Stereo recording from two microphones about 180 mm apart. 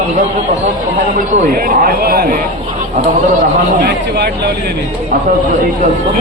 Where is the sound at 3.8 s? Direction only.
65° right (ahead or behind).